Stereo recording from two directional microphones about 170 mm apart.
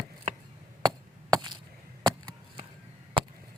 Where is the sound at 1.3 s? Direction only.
25° right (ahead or behind).